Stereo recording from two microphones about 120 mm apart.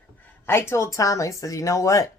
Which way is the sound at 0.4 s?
20° left (ahead or behind).